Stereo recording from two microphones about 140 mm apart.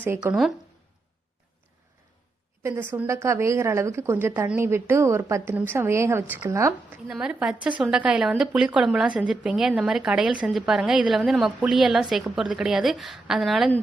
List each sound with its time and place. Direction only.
0.2 s a woman's voice: 15° right (ahead or behind)
2.6 s a woman's voice: 15° right (ahead or behind)
7.1 s a woman's voice: 5° right (ahead or behind)